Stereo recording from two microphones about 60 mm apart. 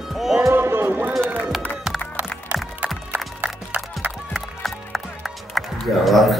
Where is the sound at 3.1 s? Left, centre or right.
Right.